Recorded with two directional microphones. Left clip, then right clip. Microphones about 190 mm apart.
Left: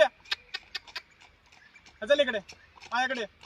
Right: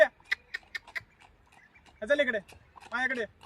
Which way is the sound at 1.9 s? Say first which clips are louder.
Left 2 dB; 30° left (ahead or behind).